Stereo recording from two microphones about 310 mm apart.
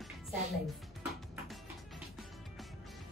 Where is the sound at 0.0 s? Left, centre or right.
Centre.